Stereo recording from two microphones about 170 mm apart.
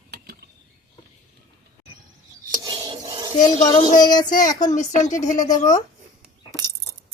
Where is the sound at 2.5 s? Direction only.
20° right (ahead or behind).